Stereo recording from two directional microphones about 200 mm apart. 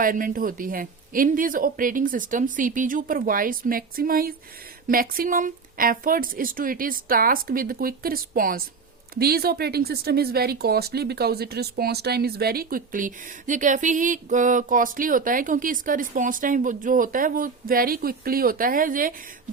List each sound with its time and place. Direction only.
0.0 s speech: 45° right (ahead or behind)